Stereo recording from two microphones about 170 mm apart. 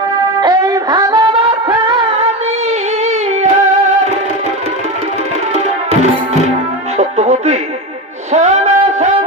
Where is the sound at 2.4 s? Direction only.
40° right (ahead or behind).